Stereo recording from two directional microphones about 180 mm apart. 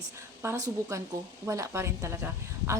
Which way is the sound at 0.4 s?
15° right (ahead or behind).